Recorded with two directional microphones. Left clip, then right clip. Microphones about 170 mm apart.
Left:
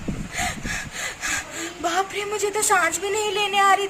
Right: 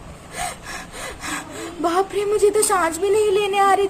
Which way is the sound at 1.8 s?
30° right (ahead or behind).